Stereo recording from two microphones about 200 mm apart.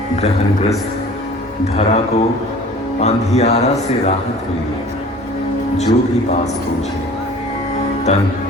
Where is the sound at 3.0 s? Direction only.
30° left (ahead or behind).